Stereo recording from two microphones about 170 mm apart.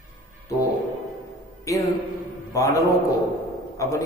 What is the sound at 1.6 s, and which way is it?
Speech, 20° left (ahead or behind).